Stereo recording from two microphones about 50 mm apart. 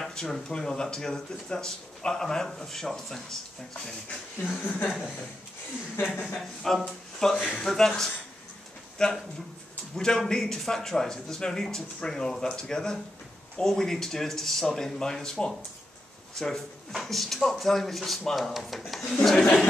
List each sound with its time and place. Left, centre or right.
0.0 s speech: centre
4.6 s speech: left
6.2 s speech: centre